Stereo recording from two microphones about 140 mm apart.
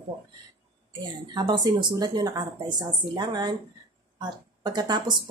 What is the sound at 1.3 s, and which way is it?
Speech, 30° right (ahead or behind).